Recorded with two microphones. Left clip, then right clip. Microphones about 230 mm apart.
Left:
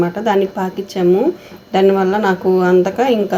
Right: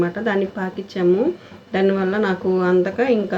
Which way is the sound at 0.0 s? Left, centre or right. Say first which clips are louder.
Left 6 dB; centre.